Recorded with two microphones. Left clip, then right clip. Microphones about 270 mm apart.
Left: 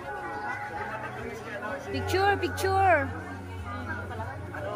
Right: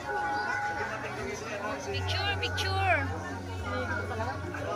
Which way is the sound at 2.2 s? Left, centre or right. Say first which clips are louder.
Left 6 dB; centre.